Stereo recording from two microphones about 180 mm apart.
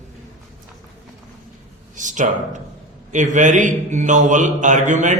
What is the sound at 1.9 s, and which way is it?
A man's voice, 45° right (ahead or behind).